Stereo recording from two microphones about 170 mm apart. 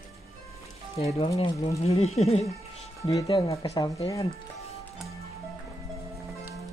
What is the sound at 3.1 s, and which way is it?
Speech, 20° left (ahead or behind).